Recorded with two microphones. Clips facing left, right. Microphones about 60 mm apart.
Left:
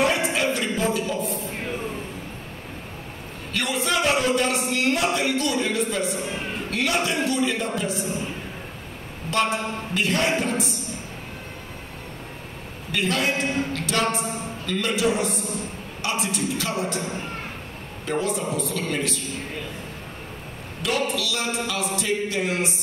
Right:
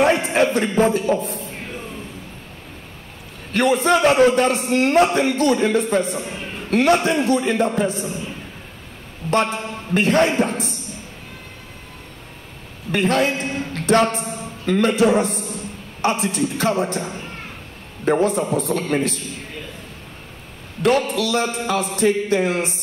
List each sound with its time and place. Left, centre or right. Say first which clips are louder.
0.0 s speech: right 5 dB; right
1.4 s music: left 1 dB; left
3.5 s a man's voice: right 8 dB; right
9.5 s a man's voice: left 1 dB; left
9.9 s a man's voice: right 7 dB; right
12.9 s a man's voice: right 6 dB; right
13.3 s a man's voice: even; left
13.7 s music: right 12 dB; right
14.1 s a man's voice: even; left
14.4 s a man's voice: right 8 dB; right
21.1 s a man's voice: right 6 dB; right